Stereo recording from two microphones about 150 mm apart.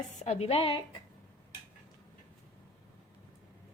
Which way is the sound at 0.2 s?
45° left (ahead or behind).